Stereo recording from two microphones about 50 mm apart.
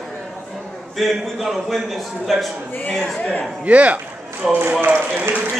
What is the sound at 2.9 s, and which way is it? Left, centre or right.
Speech, centre.